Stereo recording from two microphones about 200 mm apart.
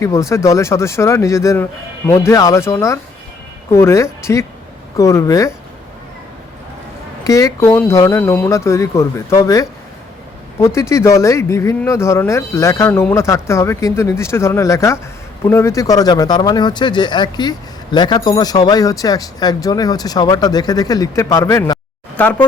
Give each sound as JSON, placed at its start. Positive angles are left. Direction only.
{"t": 0.0, "sound": "speech", "side_deg": 15}
{"t": 7.3, "sound": "speech", "side_deg": 15}
{"t": 10.8, "sound": "speech", "side_deg": 15}